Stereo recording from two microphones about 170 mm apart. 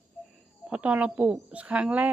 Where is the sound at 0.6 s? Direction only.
5° right (ahead or behind).